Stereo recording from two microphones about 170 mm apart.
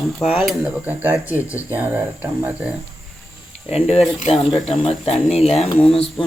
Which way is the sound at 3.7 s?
35° left (ahead or behind).